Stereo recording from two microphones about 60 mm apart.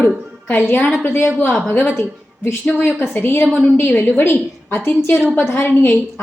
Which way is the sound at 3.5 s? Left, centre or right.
Left.